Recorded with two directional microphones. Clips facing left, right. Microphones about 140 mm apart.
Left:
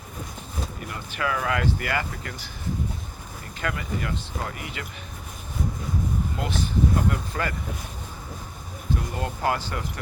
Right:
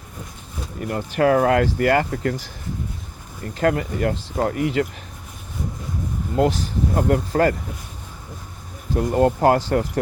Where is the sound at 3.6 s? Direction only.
45° right (ahead or behind).